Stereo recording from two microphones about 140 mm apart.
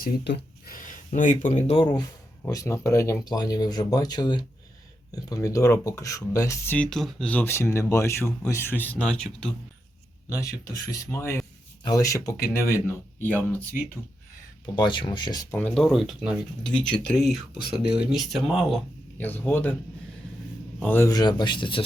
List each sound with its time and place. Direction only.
0.6 s speech: 80° left; by 1.7 s 60° left (ahead or behind)
1.7 s speech: 35° left (ahead or behind)
2.4 s speech: 25° left (ahead or behind)
6.9 s speech: 5° left (ahead or behind)
10.2 s speech: 25° left (ahead or behind)
14.8 s speech: 35° left (ahead or behind)
15.5 s speech: 5° left (ahead or behind)
19.1 s speech: 15° left (ahead or behind)
20.7 s speech: 15° left (ahead or behind)
21.1 s speech: 30° left (ahead or behind)